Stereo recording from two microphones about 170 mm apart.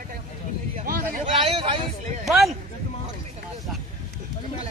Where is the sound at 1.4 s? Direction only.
30° right (ahead or behind).